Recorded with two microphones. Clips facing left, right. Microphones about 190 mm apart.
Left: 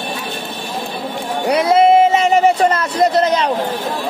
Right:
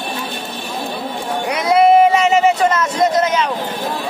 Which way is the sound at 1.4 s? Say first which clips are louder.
Left 1 dB; 30° left (ahead or behind).